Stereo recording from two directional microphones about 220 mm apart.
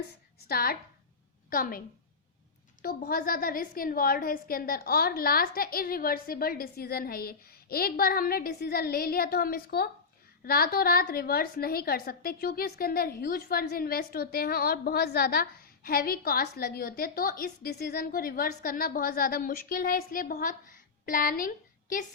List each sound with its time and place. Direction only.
0.4 s a woman's voice: 45° left (ahead or behind)
2.8 s a woman's voice: 40° left (ahead or behind)